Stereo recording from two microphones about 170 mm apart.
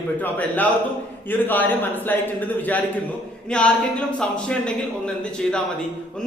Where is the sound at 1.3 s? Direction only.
10° left (ahead or behind).